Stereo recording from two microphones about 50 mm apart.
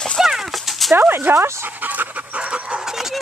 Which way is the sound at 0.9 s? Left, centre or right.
Right.